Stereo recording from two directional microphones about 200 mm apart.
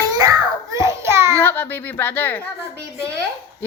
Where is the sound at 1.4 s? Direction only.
10° left (ahead or behind).